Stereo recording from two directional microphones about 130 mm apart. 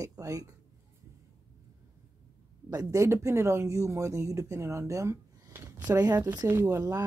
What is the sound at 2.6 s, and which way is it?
Speech, 25° right (ahead or behind).